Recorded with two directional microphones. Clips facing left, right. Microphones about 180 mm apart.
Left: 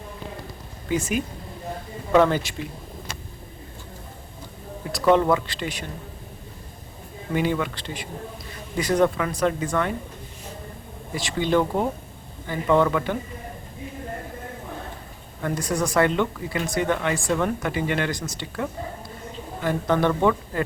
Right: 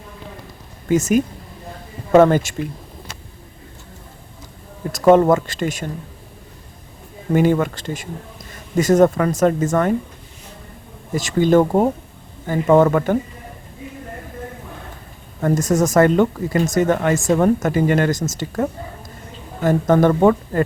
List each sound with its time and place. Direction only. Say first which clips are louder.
0.9 s speech: right 8 dB; 45° right (ahead or behind)
4.9 s speech: right 6 dB; 45° right (ahead or behind)
7.3 s speech: right 8 dB; 45° right (ahead or behind)
11.1 s speech: right 8 dB; 45° right (ahead or behind)
15.4 s speech: right 8 dB; 45° right (ahead or behind)